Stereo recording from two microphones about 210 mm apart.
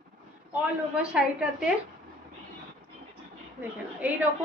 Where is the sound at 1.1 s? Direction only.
5° right (ahead or behind).